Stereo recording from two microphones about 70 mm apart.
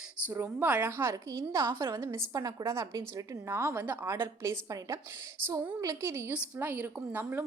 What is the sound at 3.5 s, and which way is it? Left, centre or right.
Speech, right.